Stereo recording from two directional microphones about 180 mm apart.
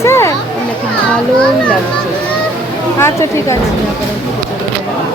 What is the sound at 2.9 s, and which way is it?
Speech, 15° left (ahead or behind).